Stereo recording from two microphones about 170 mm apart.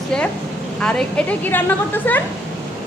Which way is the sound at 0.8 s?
5° left (ahead or behind).